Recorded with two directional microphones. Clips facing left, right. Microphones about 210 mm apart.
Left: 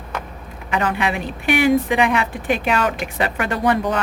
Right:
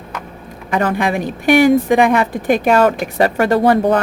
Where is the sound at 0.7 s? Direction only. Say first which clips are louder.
Right 4 dB; 40° right (ahead or behind).